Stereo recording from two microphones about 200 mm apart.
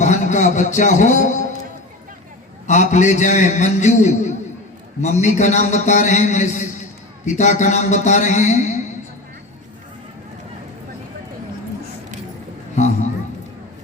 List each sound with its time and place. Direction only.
0.0 s speech: 35° left (ahead or behind)
2.9 s a man's voice: 35° left (ahead or behind)
12.7 s a sound: 35° left (ahead or behind)